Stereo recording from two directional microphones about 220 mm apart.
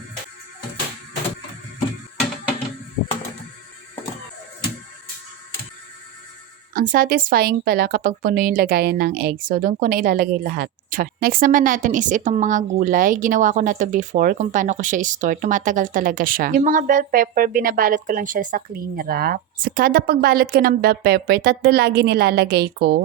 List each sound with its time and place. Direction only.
6.7 s a woman's voice: 40° right (ahead or behind)